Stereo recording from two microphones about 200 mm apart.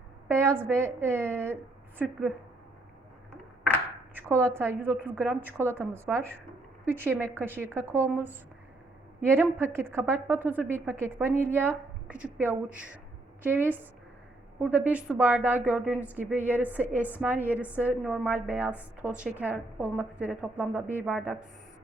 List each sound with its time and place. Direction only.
0.3 s a woman's voice: 15° right (ahead or behind)
4.1 s a woman's voice: 10° right (ahead or behind)